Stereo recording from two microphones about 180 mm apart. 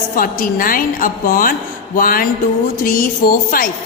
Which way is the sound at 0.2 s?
50° left (ahead or behind).